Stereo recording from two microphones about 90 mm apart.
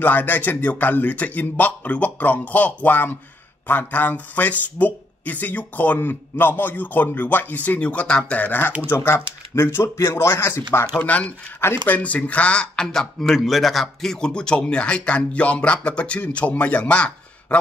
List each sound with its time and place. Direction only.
0.0 s speech: 20° left (ahead or behind)
11.0 s speech: 15° left (ahead or behind)